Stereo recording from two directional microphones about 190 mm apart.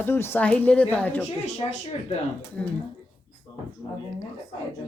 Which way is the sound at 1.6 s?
25° left (ahead or behind).